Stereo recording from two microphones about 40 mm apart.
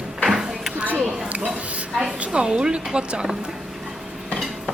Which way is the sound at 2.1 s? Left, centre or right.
Right.